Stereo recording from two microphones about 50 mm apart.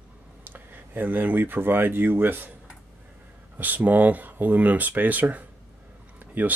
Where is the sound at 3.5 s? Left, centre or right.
Right.